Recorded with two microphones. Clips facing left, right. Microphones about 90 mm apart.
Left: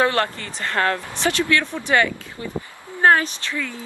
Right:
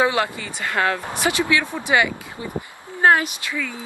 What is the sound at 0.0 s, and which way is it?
Speech, 10° right (ahead or behind).